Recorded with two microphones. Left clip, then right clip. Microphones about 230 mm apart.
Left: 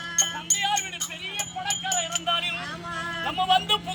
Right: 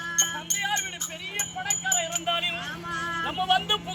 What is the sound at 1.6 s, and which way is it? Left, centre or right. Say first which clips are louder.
Music: even; centre.